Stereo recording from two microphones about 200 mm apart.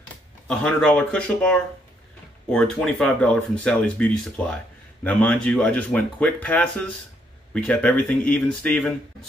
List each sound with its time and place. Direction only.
0.5 s speech: centre (ahead or behind)